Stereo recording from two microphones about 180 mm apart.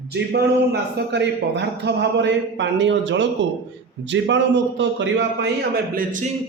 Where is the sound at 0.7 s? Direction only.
70° right (ahead or behind); by 6.2 s 50° right (ahead or behind).